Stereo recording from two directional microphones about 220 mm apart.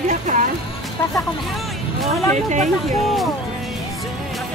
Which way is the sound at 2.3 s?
35° right (ahead or behind).